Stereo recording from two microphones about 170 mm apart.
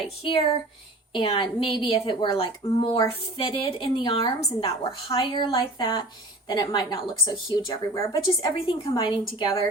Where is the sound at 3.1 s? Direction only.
30° left (ahead or behind).